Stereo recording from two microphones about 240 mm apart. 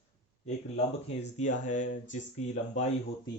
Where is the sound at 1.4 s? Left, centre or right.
Left.